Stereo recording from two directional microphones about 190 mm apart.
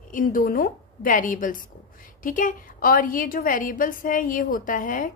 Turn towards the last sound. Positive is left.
turn(degrees=45)  # may be behind; listen again after turning